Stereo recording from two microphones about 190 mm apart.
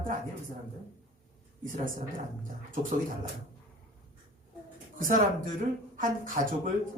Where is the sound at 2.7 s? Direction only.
45° right (ahead or behind).